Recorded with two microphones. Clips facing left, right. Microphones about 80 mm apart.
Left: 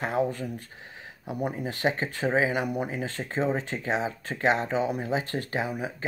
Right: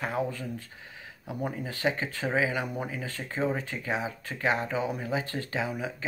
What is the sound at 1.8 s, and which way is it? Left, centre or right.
Speech, left.